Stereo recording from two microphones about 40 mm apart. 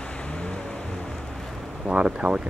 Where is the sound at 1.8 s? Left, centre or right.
Right.